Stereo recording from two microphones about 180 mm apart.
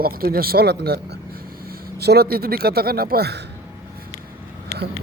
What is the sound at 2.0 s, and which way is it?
Speech, 60° right (ahead or behind).